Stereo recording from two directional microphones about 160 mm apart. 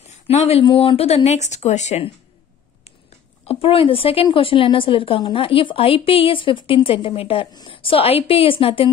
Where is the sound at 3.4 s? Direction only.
35° left (ahead or behind).